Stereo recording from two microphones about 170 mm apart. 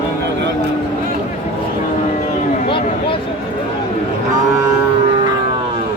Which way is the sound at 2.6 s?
30° left (ahead or behind).